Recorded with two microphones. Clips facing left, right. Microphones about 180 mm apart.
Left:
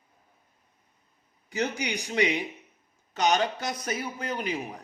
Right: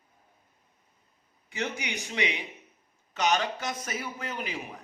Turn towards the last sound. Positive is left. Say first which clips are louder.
# left 4 dB
turn(degrees=40)  # may be behind; listen again after turning